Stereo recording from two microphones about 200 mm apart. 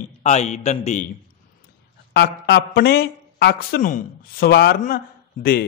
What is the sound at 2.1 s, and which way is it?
A man's voice, 55° left (ahead or behind).